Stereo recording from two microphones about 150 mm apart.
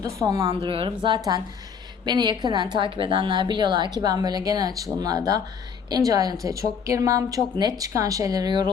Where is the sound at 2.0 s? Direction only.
30° right (ahead or behind).